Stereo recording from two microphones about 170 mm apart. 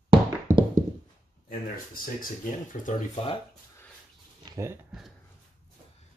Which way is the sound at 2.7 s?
45° left (ahead or behind).